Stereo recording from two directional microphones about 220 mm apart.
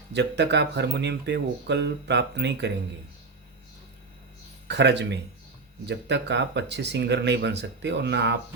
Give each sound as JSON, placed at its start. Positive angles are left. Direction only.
{"t": 0.1, "sound": "speech", "side_deg": -50}
{"t": 4.7, "sound": "speech", "side_deg": -50}